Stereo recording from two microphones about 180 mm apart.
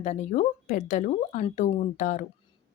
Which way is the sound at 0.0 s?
40° left (ahead or behind).